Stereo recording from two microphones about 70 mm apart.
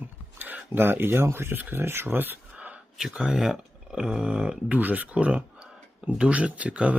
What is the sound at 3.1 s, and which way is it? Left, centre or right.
Speech, centre.